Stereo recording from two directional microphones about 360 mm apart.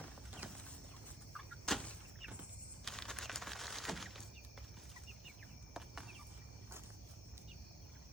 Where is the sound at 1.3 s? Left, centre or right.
Centre.